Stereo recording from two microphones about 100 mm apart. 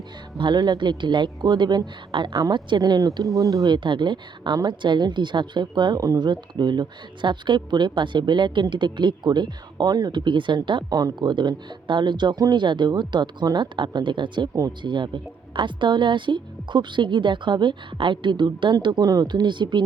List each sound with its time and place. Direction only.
0.3 s a woman's voice: 50° right (ahead or behind)
3.8 s a woman's voice: 50° right (ahead or behind)